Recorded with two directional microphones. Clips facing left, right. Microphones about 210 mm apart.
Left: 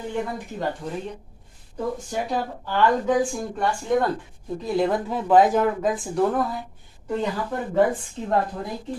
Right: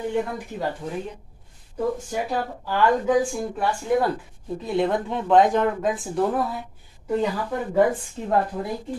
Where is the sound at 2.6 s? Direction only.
5° right (ahead or behind).